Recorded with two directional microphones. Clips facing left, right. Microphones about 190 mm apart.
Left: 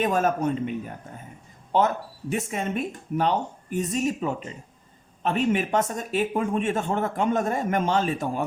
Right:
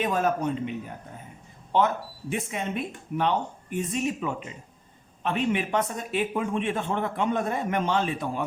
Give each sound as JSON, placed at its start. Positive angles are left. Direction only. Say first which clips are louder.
{"t": 0.0, "sound": "speech", "louder": "left 2 dB", "side_deg": 45}
{"t": 1.7, "sound": "speech", "louder": "left 1 dB", "side_deg": 40}